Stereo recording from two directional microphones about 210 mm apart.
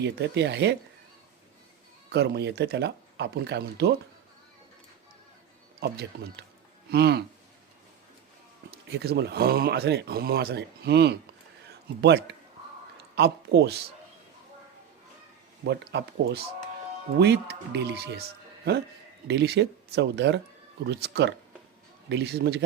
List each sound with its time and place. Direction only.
0.0 s speech: 55° right (ahead or behind)
2.0 s speech: 50° right (ahead or behind)
5.8 s speech: 50° right (ahead or behind)
8.7 s speech: 50° right (ahead or behind)
15.6 s speech: 50° right (ahead or behind)
19.3 s speech: 55° right (ahead or behind)